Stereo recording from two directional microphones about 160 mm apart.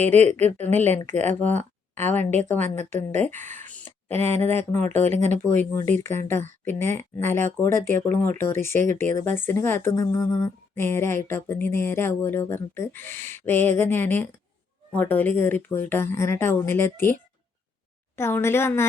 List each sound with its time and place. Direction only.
0.0 s a woman's voice: 45° right (ahead or behind)
0.5 s speech: 10° left (ahead or behind)
2.6 s a woman's voice: 45° right (ahead or behind)
3.2 s speech: 10° left (ahead or behind)
4.8 s a woman's voice: 45° right (ahead or behind)
5.4 s speech: 15° left (ahead or behind)
6.8 s a woman's voice: 45° right (ahead or behind)
7.3 s speech: 15° left (ahead or behind)
18.2 s speech: 15° left (ahead or behind)